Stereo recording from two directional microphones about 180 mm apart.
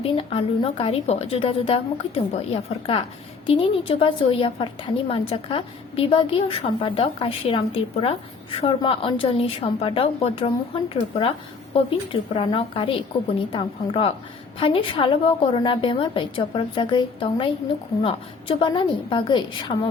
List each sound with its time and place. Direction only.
0.0 s a woman's voice: 30° left (ahead or behind)